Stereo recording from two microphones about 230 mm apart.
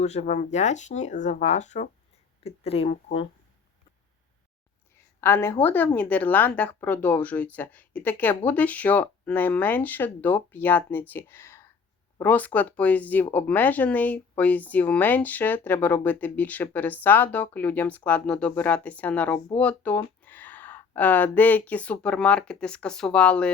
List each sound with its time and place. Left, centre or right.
0.0 s speech: left
5.2 s speech: centre